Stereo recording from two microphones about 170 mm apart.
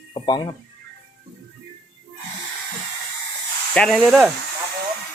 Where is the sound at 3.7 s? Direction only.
5° left (ahead or behind).